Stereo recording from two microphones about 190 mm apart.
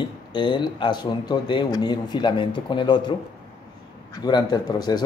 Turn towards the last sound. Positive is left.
turn(degrees=20)  # may be behind; listen again after turning